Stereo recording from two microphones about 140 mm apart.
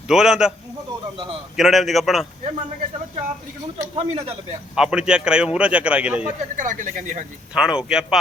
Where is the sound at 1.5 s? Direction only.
Centre (ahead or behind).